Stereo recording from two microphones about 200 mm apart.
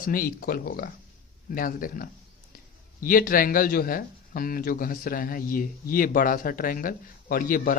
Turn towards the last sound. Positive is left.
turn(degrees=45)  # may be behind; listen again after turning